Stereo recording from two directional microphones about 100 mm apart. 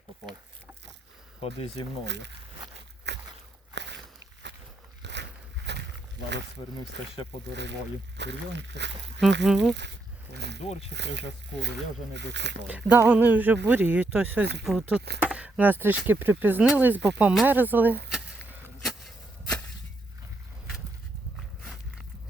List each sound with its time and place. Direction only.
1.4 s speech: 75° left (ahead or behind)
9.2 s speech: 5° right (ahead or behind)
10.6 s speech: 90° left
12.6 s speech: 15° right (ahead or behind)
18.8 s a sound: centre (ahead or behind)
21.6 s walk: centre (ahead or behind)